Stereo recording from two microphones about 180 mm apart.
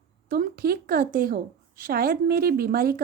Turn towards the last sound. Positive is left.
turn(degrees=-55)  # may be behind; listen again after turning